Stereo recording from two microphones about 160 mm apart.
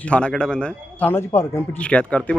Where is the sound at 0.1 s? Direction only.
5° left (ahead or behind).